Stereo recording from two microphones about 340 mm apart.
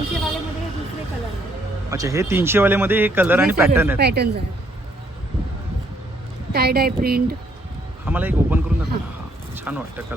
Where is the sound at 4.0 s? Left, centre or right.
Right.